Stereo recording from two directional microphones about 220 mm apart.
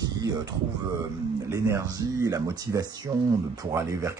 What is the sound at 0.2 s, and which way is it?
Speech, 15° right (ahead or behind).